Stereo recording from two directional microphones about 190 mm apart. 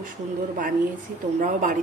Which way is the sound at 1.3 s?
40° right (ahead or behind).